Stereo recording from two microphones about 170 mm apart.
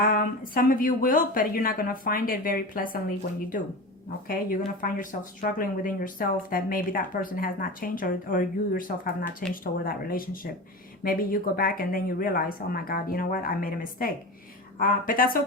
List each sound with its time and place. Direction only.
0.5 s speech: 55° left (ahead or behind)
4.3 s speech: 55° left (ahead or behind)